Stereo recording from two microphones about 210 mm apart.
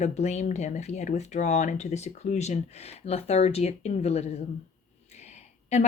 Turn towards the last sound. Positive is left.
turn(degrees=30)  # may be behind; listen again after turning